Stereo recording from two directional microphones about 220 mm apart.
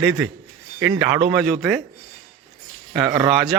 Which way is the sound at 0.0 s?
Centre (ahead or behind).